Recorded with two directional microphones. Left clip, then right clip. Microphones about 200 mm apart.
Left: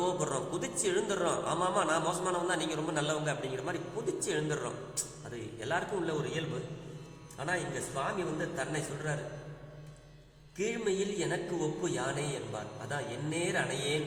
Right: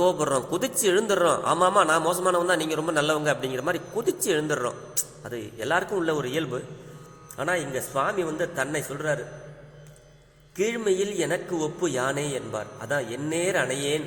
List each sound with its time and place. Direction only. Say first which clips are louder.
0.0 s a man's voice: right 10 dB; 35° right (ahead or behind)
10.6 s a man's voice: right 8 dB; 40° right (ahead or behind)